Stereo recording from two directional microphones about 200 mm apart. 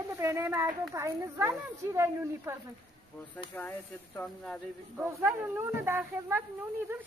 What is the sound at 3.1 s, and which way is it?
Speech, 10° left (ahead or behind).